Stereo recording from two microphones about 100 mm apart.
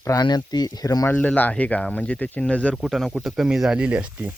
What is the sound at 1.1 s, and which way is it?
Speech, 15° left (ahead or behind).